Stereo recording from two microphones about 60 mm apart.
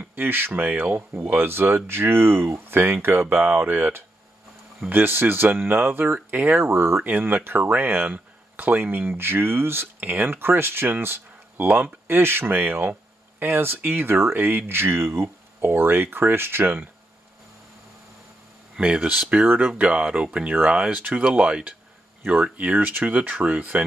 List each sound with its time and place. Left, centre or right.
0.0 s a sound: right
0.5 s speech: right
6.6 s speech: right
7.1 s speech: right
9.9 s speech: right
18.8 s speech: right
19.4 s speech: right
19.8 s speech: centre